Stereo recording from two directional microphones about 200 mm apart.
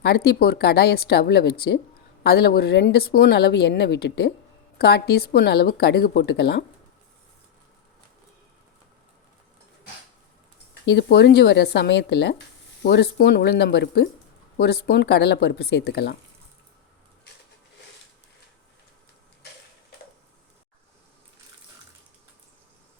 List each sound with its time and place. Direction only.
0.0 s speech: 50° left (ahead or behind)
10.8 s speech: 55° left (ahead or behind)